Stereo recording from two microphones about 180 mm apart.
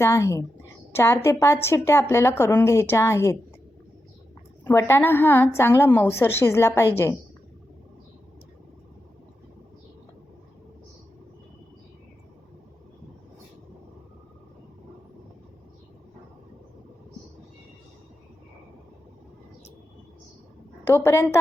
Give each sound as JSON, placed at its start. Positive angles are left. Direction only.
{"t": 0.0, "sound": "a woman's voice", "side_deg": 15}
{"t": 4.6, "sound": "a woman's voice", "side_deg": 15}
{"t": 20.8, "sound": "a woman's voice", "side_deg": 15}